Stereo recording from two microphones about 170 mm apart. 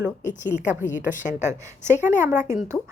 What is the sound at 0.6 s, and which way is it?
A woman's voice, 10° right (ahead or behind).